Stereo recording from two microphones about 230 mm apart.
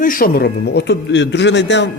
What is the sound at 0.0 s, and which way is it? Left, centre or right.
A man's voice, left.